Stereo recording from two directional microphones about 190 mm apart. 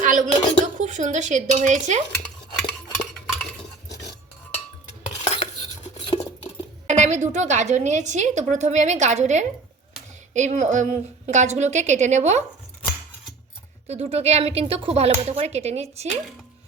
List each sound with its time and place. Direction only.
0.0 s a sound: 40° right (ahead or behind)
5.0 s cutlery: 35° left (ahead or behind)
6.8 s a woman's voice: 40° right (ahead or behind)
13.8 s a woman's voice: 35° right (ahead or behind)